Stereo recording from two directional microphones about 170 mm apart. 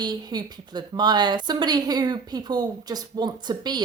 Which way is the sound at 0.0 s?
25° right (ahead or behind).